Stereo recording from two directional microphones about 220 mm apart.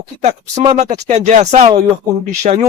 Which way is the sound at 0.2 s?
30° right (ahead or behind).